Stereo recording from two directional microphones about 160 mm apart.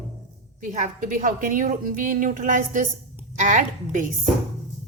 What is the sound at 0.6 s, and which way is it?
A woman's voice, 50° right (ahead or behind).